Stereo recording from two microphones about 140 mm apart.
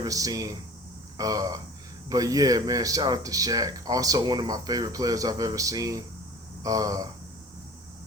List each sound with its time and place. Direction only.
0.0 s speech: 25° right (ahead or behind)